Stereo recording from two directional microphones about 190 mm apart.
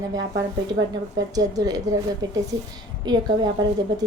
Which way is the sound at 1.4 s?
20° right (ahead or behind).